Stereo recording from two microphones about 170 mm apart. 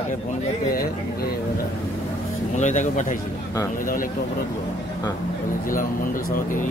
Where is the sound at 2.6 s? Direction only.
45° left (ahead or behind).